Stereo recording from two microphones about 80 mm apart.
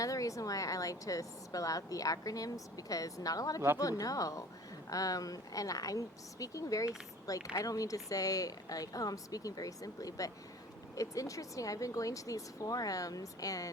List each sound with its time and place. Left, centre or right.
0.0 s a woman's voice: left